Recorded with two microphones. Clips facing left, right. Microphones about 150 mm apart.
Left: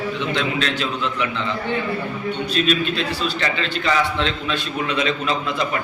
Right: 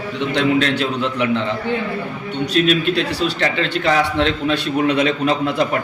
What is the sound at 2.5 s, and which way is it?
A man's voice, 70° right (ahead or behind).